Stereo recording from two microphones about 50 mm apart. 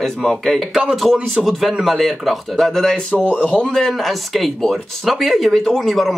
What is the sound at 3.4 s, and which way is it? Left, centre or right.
Speech, left.